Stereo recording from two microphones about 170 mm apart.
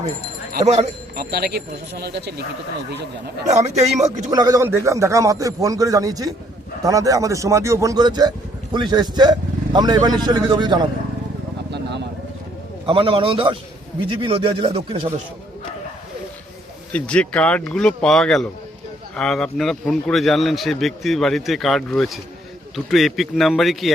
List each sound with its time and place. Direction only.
0.6 s speech: 40° right (ahead or behind)
1.1 s speech: 65° right (ahead or behind)
3.5 s speech: 40° right (ahead or behind)
4.3 s speech: 20° right (ahead or behind)
11.7 s vehicle: 90° right
12.8 s speech: 30° right (ahead or behind)
16.9 s a man's voice: 5° left (ahead or behind)